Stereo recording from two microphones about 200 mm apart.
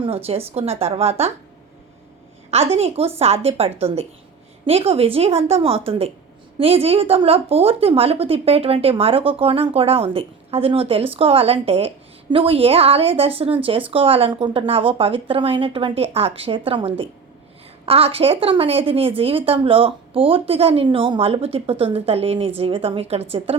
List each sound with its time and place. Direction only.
0.0 s a woman's voice: 30° right (ahead or behind)
2.5 s a woman's voice: 30° right (ahead or behind)